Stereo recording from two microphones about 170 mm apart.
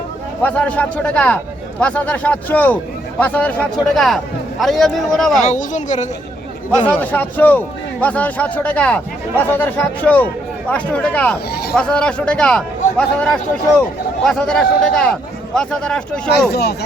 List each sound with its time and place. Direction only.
0.4 s a man's voice: 10° left (ahead or behind)
5.4 s speech: 45° left (ahead or behind)
6.7 s a man's voice: 10° left (ahead or behind)
16.5 s speech: 70° left (ahead or behind)